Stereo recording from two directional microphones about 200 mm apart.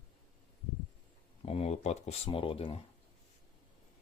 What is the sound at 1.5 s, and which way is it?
Speech, 30° left (ahead or behind).